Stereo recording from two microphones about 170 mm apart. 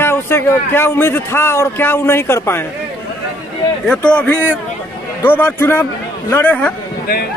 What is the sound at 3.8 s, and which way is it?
A man's voice, 5° left (ahead or behind).